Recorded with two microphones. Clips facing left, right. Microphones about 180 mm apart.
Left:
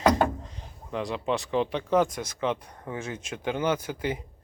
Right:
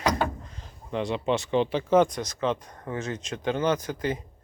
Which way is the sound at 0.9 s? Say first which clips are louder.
Right 2 dB; centre (ahead or behind).